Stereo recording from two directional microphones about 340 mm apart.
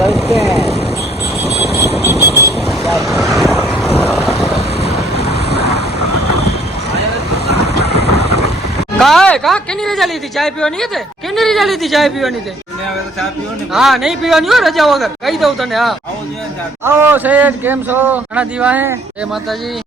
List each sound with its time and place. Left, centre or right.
0.0 s vehicle: centre
4.9 s vehicle: left
7.4 s vehicle: left
9.0 s speech: centre
13.7 s speech: centre